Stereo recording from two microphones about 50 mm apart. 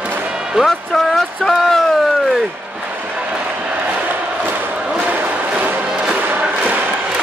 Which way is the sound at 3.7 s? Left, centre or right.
Right.